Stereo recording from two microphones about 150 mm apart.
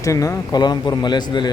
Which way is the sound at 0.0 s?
20° left (ahead or behind).